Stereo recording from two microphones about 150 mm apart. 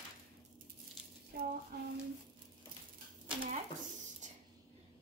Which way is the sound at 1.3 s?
90° right.